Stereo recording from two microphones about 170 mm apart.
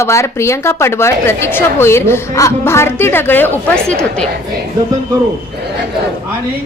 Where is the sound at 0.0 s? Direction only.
15° left (ahead or behind).